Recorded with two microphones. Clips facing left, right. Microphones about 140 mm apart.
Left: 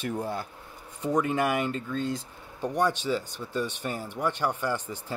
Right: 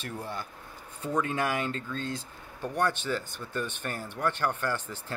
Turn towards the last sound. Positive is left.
turn(degrees=15)  # may be behind; listen again after turning